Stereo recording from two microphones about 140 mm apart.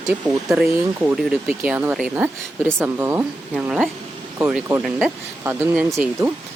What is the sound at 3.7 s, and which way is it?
Speech, 5° right (ahead or behind).